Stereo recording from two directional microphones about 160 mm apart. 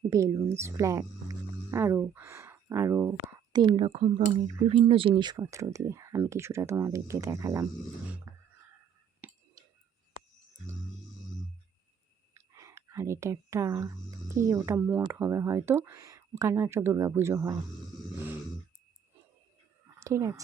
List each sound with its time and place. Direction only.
0.1 s speech: 20° right (ahead or behind)
3.6 s speech: 30° right (ahead or behind)
9.2 s whispering: 10° right (ahead or behind)
12.3 s speech: 20° right (ahead or behind)
20.0 s speech: 20° right (ahead or behind)